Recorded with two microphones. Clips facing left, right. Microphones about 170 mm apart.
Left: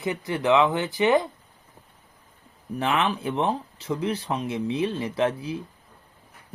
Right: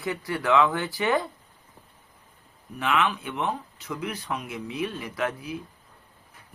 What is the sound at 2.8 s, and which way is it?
Speech, 35° left (ahead or behind).